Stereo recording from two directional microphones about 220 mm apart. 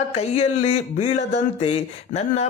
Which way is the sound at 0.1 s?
30° left (ahead or behind).